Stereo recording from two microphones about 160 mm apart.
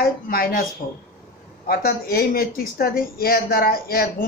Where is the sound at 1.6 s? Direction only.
65° left (ahead or behind).